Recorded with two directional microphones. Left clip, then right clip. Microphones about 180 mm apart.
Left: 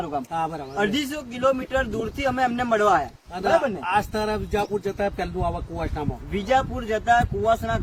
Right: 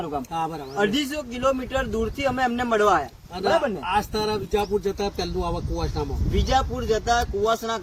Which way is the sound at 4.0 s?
10° left (ahead or behind).